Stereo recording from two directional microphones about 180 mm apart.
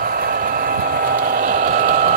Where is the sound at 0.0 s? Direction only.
55° right (ahead or behind).